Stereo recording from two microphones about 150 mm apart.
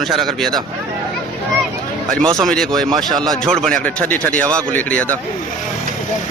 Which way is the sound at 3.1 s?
30° right (ahead or behind).